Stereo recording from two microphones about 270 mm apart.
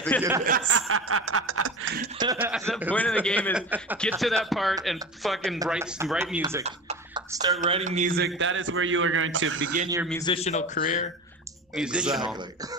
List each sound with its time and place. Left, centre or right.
0.1 s speech: centre
0.7 s snicker: right
2.1 s speech: centre
3.7 s speech: centre
6.6 s a sound: right
7.4 s a man's voice: right
8.4 s snicker: right
10.0 s a man's voice: centre
11.7 s speech: centre